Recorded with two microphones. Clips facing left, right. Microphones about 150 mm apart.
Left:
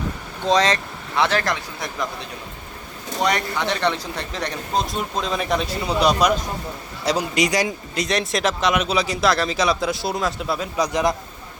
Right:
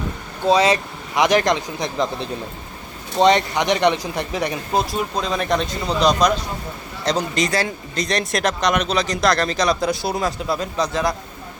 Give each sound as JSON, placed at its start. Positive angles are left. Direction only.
{"t": 0.4, "sound": "speech", "side_deg": -10}
{"t": 3.2, "sound": "speech", "side_deg": -25}